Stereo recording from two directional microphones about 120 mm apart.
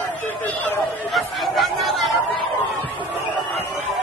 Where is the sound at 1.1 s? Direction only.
Centre (ahead or behind).